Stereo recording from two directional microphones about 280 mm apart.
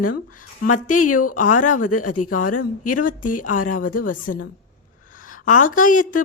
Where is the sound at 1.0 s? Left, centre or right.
Left.